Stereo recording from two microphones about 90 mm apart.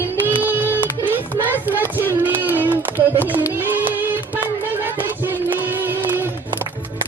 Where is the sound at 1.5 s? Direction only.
20° right (ahead or behind).